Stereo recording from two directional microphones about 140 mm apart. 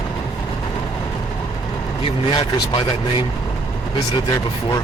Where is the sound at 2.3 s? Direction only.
35° left (ahead or behind).